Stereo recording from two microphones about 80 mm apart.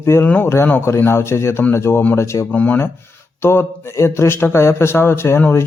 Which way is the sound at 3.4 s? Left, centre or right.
Left.